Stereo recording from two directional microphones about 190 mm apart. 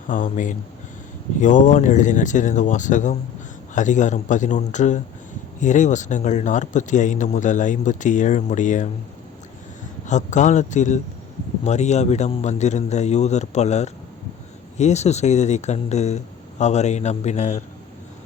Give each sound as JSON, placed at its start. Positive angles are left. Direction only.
{"t": 0.1, "sound": "speech", "side_deg": 45}
{"t": 10.1, "sound": "speech", "side_deg": 40}